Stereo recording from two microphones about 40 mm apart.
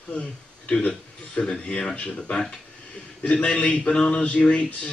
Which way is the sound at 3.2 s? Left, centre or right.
Left.